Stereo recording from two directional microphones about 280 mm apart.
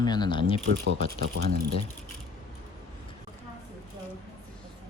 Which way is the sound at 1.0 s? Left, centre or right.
Right.